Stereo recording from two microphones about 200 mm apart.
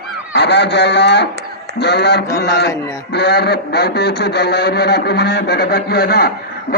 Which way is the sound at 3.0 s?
55° left (ahead or behind).